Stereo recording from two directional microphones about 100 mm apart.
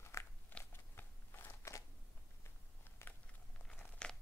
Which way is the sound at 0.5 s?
20° left (ahead or behind).